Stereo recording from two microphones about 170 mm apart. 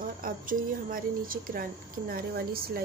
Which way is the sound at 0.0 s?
50° right (ahead or behind).